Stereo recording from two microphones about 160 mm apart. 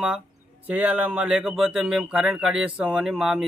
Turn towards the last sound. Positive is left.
turn(degrees=0)  # may be behind; listen again after turning